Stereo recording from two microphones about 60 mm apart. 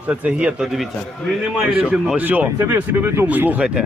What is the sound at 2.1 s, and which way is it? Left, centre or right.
Speech, right.